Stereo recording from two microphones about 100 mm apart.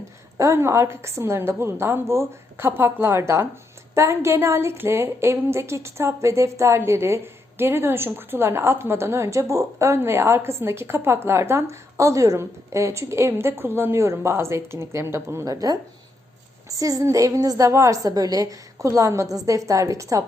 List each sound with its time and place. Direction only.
0.3 s a woman's voice: 30° right (ahead or behind)